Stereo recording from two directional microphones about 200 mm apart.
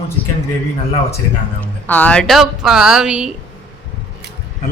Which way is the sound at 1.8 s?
10° left (ahead or behind).